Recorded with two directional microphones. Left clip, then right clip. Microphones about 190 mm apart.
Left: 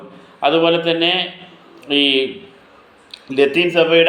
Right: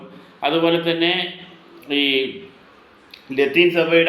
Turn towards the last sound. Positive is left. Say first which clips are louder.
# left 2 dB
turn(degrees=20)  # may be behind; listen again after turning